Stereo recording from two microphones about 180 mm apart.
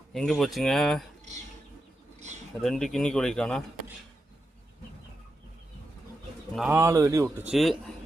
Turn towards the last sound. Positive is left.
turn(degrees=0)  # may be behind; listen again after turning